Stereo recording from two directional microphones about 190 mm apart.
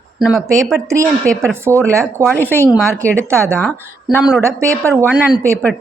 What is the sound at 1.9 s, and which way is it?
Speech, 15° right (ahead or behind).